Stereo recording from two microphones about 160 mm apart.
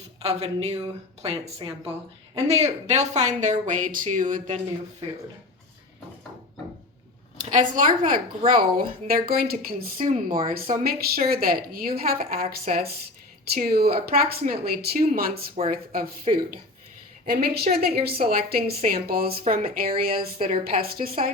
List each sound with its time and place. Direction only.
0.2 s speech: 40° right (ahead or behind)
7.3 s a woman's voice: 55° right (ahead or behind)
17.2 s a woman's voice: 75° right (ahead or behind)